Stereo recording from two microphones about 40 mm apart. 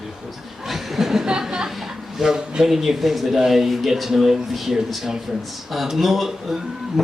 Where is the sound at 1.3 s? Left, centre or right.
Centre.